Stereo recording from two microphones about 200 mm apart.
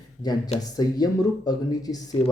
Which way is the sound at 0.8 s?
20° left (ahead or behind).